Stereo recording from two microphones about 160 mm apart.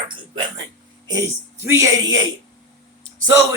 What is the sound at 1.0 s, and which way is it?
Speech, 20° right (ahead or behind).